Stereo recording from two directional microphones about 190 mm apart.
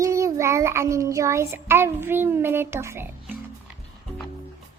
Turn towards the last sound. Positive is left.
turn(degrees=-10)  # may be behind; listen again after turning